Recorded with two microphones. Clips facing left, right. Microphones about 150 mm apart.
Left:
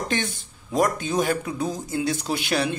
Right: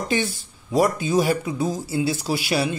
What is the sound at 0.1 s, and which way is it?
Speech, 5° right (ahead or behind).